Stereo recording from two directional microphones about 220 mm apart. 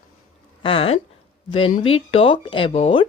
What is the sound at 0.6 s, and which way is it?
Speech, 25° left (ahead or behind).